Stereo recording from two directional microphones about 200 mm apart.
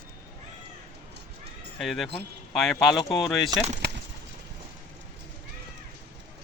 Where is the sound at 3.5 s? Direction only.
20° right (ahead or behind).